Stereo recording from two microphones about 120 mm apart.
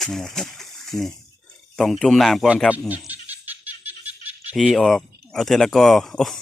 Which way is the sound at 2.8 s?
15° right (ahead or behind).